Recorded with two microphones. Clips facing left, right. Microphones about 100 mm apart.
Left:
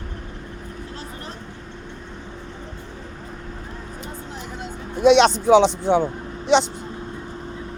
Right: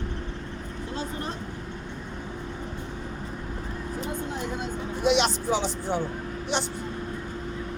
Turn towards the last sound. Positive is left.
turn(degrees=90)